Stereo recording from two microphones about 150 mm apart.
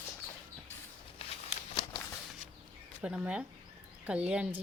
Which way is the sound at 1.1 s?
40° left (ahead or behind).